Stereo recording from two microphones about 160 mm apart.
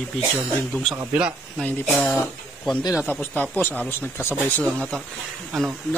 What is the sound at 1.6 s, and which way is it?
Speech, 10° left (ahead or behind).